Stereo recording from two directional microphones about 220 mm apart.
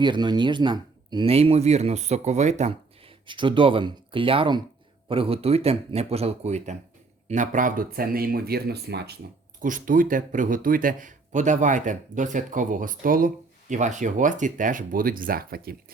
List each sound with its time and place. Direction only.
0.0 s a man's voice: 20° right (ahead or behind); by 9.1 s 50° right (ahead or behind)
9.6 s speech: 35° right (ahead or behind)